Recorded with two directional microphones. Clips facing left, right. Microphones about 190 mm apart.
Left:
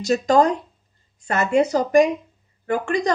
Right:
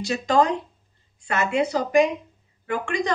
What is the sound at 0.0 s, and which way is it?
Speech, 40° left (ahead or behind).